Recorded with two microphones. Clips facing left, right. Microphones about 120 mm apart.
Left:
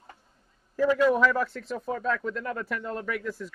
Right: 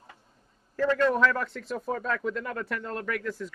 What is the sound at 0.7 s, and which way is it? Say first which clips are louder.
A man's voice: left 2 dB; 10° left (ahead or behind).